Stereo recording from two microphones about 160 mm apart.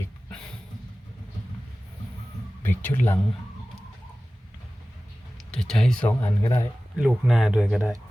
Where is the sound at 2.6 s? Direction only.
10° left (ahead or behind).